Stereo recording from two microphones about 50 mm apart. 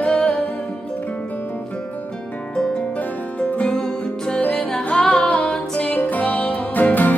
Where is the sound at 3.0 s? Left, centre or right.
Left.